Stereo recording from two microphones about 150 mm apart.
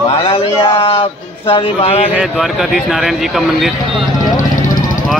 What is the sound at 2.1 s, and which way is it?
Speech, 5° right (ahead or behind).